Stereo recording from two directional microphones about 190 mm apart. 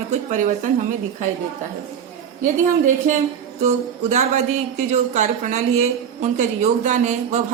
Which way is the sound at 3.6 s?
35° right (ahead or behind).